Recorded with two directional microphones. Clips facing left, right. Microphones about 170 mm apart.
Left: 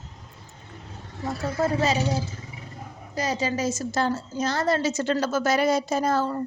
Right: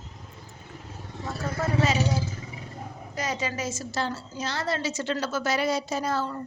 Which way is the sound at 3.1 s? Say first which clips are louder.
Left 4 dB; 35° left (ahead or behind).